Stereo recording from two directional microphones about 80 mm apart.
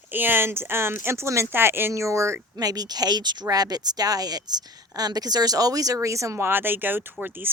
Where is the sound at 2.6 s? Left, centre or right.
Right.